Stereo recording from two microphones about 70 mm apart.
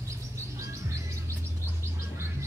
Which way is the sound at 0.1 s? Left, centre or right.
Right.